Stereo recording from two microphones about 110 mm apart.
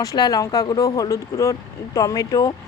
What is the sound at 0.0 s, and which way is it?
Speech, 35° left (ahead or behind).